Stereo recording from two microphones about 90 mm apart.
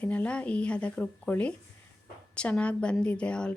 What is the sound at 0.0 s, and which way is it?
Speech, 15° left (ahead or behind).